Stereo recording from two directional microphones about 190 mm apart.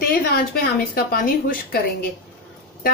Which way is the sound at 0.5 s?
50° left (ahead or behind).